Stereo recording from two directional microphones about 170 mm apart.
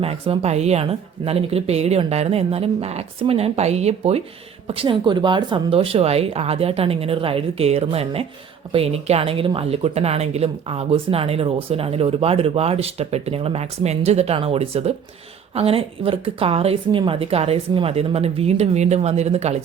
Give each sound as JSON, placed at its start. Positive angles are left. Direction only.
{"t": 0.0, "sound": "speech", "side_deg": -35}